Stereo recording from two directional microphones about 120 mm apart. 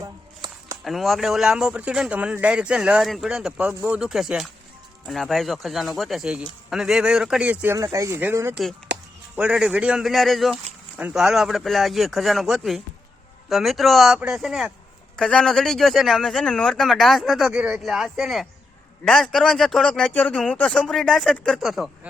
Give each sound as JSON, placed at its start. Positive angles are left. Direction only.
{"t": 0.0, "sound": "a sound", "side_deg": -30}
{"t": 0.9, "sound": "speech", "side_deg": 0}
{"t": 7.8, "sound": "speech", "side_deg": -25}
{"t": 9.3, "sound": "speech", "side_deg": -10}